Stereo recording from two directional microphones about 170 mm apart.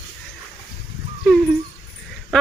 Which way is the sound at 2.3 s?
5° left (ahead or behind).